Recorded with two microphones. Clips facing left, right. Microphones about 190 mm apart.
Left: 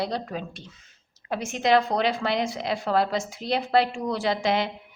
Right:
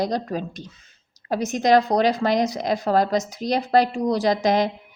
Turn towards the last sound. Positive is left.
turn(degrees=-40)  # may be behind; listen again after turning